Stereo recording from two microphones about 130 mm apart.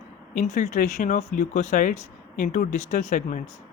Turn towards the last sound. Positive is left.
turn(degrees=75)  # may be behind; listen again after turning